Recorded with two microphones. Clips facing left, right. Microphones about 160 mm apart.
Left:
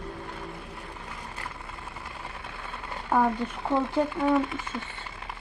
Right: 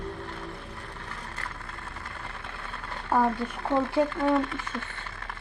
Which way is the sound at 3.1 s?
5° left (ahead or behind).